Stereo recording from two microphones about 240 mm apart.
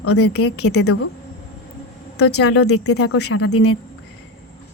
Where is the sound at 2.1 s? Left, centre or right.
Left.